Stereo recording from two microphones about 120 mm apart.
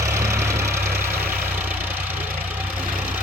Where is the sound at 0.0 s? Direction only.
25° right (ahead or behind).